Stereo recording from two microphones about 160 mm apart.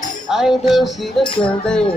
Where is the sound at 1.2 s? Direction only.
30° left (ahead or behind).